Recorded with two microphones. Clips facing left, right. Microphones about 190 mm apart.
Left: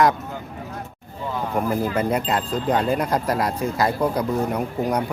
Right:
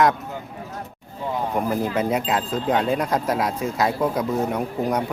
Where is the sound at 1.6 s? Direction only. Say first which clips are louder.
Left 2 dB; centre (ahead or behind).